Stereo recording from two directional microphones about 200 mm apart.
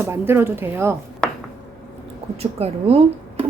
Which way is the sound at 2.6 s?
30° right (ahead or behind).